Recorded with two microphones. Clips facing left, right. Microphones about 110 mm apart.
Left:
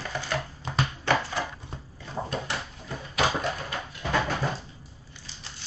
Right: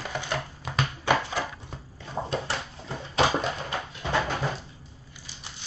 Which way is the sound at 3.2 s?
25° right (ahead or behind).